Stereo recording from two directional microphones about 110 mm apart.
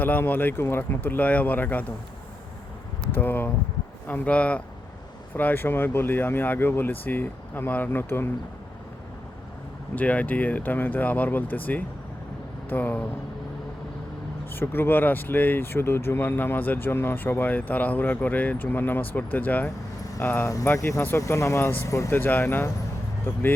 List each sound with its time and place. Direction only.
0.0 s speech: 15° left (ahead or behind)
3.1 s speech: 15° left (ahead or behind)
9.9 s speech: 15° left (ahead or behind)
14.5 s speech: 20° left (ahead or behind)
20.4 s speech: 30° left (ahead or behind)